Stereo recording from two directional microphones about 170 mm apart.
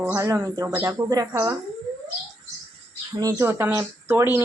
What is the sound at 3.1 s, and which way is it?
Speech, 20° right (ahead or behind).